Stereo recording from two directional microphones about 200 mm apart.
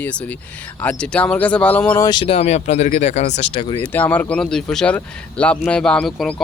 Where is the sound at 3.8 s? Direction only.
10° left (ahead or behind).